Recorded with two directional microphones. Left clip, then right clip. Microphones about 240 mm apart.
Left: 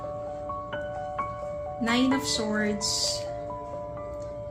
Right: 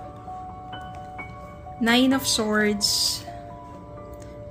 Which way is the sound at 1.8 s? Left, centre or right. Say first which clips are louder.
Right 5 dB; right.